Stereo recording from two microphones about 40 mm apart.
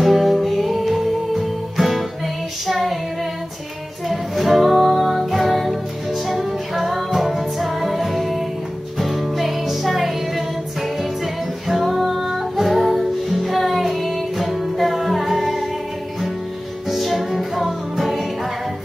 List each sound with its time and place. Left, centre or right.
0.0 s music: centre
2.6 s child singing: centre
4.1 s music: centre
11.6 s music: centre
16.9 s music: centre